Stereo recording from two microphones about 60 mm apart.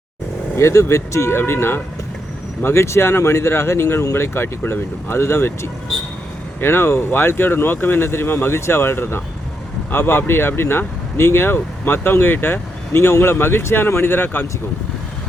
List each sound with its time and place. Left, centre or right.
0.5 s speech: left